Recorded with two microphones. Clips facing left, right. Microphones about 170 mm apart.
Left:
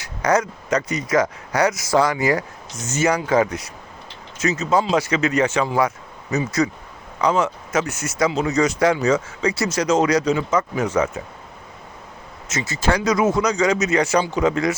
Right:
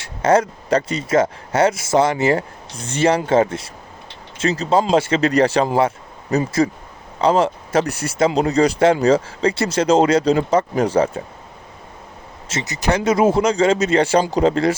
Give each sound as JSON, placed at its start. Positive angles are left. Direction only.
{"t": 0.0, "sound": "speech", "side_deg": -25}
{"t": 12.5, "sound": "speech", "side_deg": -25}